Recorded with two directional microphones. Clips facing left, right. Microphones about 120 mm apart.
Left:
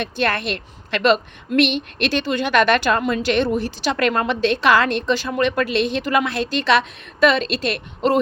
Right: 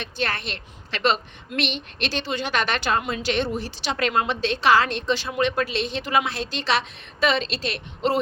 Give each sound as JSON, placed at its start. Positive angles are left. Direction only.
{"t": 0.0, "sound": "a woman's voice", "side_deg": 55}